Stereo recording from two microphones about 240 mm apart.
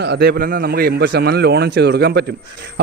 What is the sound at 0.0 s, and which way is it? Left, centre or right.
A man's voice, right.